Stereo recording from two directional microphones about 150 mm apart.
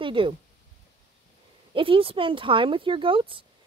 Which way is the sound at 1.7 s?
35° right (ahead or behind).